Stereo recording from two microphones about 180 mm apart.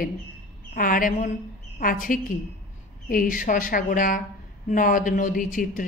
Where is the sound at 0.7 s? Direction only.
50° left (ahead or behind).